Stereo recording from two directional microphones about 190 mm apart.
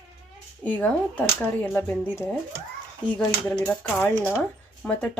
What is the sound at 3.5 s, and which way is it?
Speech, 5° left (ahead or behind).